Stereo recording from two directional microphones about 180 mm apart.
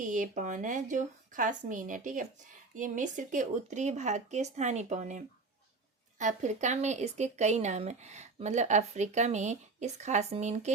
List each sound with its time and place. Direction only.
0.1 s a woman's voice: 45° right (ahead or behind)